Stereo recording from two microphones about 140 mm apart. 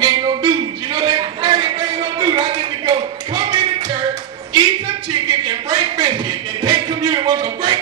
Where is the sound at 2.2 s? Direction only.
35° right (ahead or behind).